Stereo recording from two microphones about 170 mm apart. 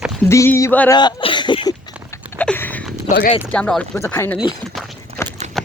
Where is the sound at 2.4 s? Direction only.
10° left (ahead or behind).